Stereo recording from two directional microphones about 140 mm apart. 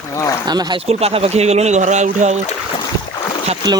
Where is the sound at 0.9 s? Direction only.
45° right (ahead or behind).